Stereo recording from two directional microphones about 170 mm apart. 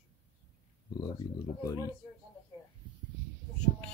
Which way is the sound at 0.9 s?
20° left (ahead or behind).